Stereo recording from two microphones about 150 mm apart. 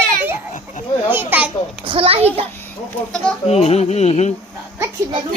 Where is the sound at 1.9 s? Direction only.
40° right (ahead or behind).